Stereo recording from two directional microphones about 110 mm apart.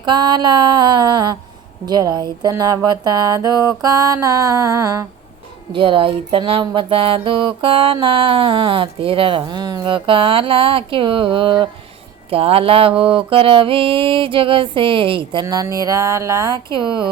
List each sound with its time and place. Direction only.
0.0 s mantra: 45° right (ahead or behind)
1.9 s a sound: 40° right (ahead or behind)
5.7 s mantra: 50° right (ahead or behind)
9.9 s mantra: 50° right (ahead or behind)
12.3 s speech: 60° right (ahead or behind)
13.0 s mantra: 55° right (ahead or behind)
15.4 s a sound: 35° right (ahead or behind)
16.7 s mantra: 45° right (ahead or behind)